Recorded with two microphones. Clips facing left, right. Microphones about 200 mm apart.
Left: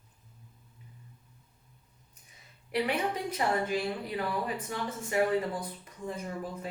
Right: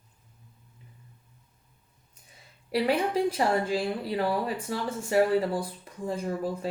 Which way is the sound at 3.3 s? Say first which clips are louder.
Right 4 dB; 30° right (ahead or behind).